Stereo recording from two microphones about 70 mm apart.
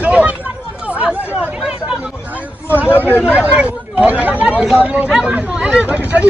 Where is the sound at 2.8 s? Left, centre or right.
Left.